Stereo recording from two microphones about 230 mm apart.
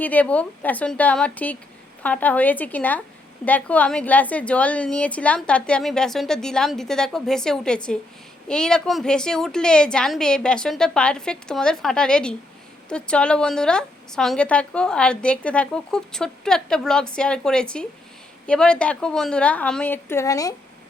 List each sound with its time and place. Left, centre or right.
0.0 s a woman's voice: centre